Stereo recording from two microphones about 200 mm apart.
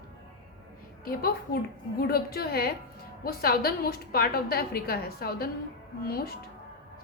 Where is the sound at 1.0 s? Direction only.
50° left (ahead or behind).